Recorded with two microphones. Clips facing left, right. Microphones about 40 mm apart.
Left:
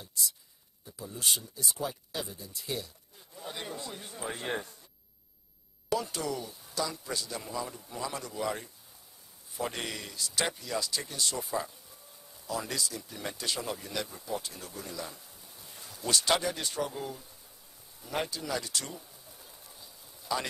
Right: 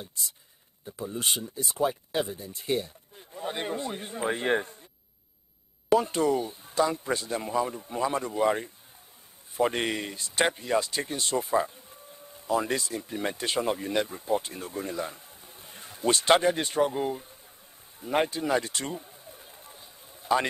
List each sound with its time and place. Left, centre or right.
0.8 s speech: right
5.9 s speech: right
18.0 s a sound: right